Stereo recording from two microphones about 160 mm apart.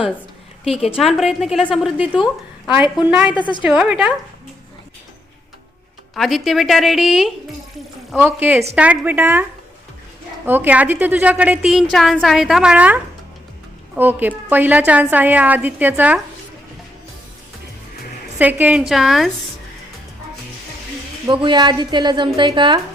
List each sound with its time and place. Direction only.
0.7 s a woman's voice: 5° right (ahead or behind)
2.7 s a woman's voice: 30° left (ahead or behind)
3.6 s a woman's voice: 5° right (ahead or behind)
6.1 s a woman's voice: centre (ahead or behind)
18.3 s a woman's voice: 10° right (ahead or behind)
21.4 s a woman's voice: 30° right (ahead or behind)